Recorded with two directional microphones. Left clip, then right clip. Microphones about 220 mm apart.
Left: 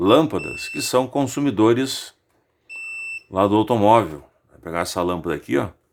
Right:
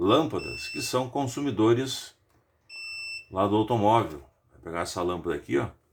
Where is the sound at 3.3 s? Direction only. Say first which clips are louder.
Left 7 dB; 45° left (ahead or behind).